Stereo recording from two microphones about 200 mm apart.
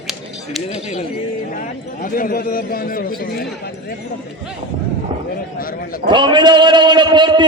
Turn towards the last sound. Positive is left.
turn(degrees=-25)  # may be behind; listen again after turning